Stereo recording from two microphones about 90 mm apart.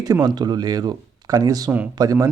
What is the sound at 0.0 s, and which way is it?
Speech, 45° right (ahead or behind).